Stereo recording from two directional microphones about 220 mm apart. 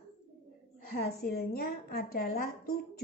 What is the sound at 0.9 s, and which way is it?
A woman's voice, 45° left (ahead or behind).